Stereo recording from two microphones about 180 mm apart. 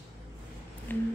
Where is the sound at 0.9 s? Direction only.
10° left (ahead or behind).